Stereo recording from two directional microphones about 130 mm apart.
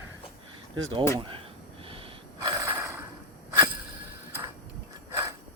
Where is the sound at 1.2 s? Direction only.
40° right (ahead or behind).